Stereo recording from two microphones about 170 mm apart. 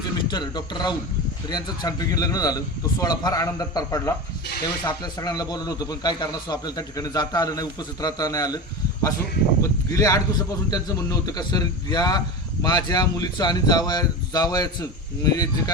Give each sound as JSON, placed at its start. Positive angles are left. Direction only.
{"t": 0.3, "sound": "a man's voice", "side_deg": 25}